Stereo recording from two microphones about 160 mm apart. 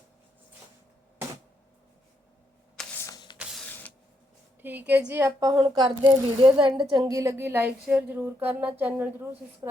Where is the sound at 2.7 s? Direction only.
10° left (ahead or behind).